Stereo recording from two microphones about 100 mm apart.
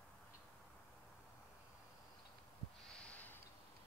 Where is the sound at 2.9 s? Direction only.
10° left (ahead or behind).